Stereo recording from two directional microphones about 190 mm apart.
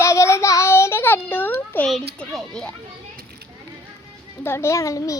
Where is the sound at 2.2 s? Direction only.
5° left (ahead or behind).